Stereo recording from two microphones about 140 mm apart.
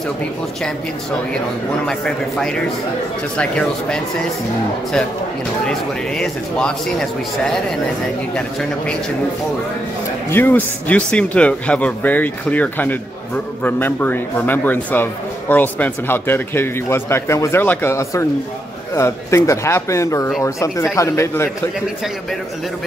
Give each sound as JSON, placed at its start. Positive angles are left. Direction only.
{"t": 1.9, "sound": "a man's voice", "side_deg": 5}
{"t": 10.3, "sound": "speech", "side_deg": 15}